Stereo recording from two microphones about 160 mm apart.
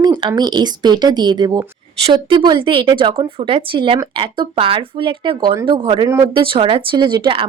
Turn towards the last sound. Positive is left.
turn(degrees=-30)  # may be behind; listen again after turning